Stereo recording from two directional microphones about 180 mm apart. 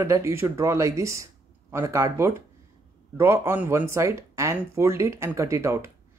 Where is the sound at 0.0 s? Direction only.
15° right (ahead or behind).